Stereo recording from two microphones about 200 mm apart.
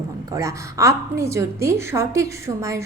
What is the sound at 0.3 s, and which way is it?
A woman's voice, 15° right (ahead or behind).